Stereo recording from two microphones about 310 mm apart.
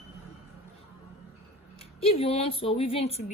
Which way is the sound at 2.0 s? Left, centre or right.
Centre.